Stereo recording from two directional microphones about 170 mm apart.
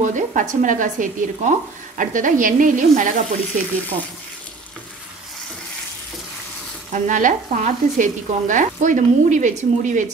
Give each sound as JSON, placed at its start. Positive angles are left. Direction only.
{"t": 0.0, "sound": "stir", "side_deg": -50}
{"t": 6.9, "sound": "stir", "side_deg": -50}